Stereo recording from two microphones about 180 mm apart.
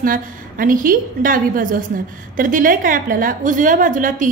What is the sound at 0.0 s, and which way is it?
A woman's voice, 50° right (ahead or behind).